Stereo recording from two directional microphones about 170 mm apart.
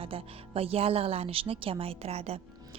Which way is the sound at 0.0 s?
35° right (ahead or behind).